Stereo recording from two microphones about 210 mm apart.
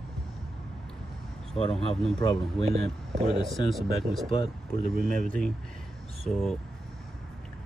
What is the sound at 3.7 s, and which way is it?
Speech, centre (ahead or behind).